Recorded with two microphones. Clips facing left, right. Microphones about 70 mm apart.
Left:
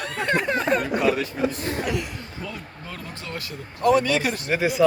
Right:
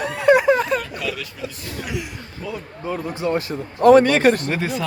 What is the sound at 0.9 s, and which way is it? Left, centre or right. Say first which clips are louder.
Speech: left 7 dB; left.